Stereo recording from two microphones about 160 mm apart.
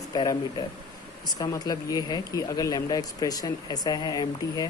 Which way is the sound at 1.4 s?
25° left (ahead or behind).